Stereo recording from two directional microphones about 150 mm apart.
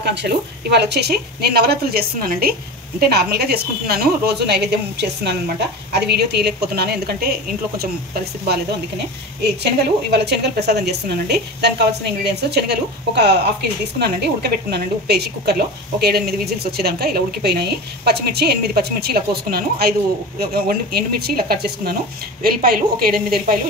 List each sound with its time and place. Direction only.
0.2 s a woman's voice: 90° right
10.1 s a woman's voice: 90° right